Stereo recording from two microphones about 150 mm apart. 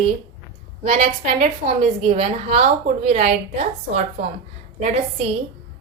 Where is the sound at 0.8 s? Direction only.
45° right (ahead or behind).